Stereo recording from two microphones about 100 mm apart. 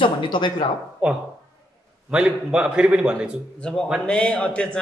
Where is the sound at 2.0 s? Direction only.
10° right (ahead or behind).